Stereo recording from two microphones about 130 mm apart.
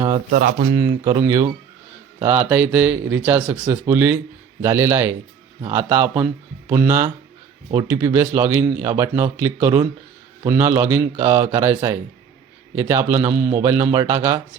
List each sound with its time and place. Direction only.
0.8 s speech: 25° right (ahead or behind)